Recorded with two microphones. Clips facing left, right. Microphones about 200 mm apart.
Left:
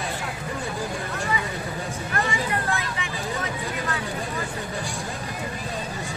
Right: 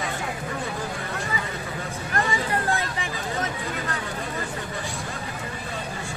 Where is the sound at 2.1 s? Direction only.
35° right (ahead or behind).